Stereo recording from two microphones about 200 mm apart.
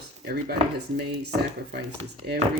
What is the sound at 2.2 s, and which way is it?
Speech, 60° right (ahead or behind).